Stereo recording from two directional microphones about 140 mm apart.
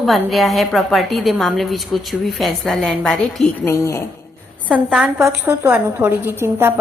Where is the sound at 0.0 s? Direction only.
Centre (ahead or behind).